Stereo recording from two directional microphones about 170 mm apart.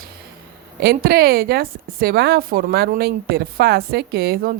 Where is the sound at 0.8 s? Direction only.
70° right (ahead or behind).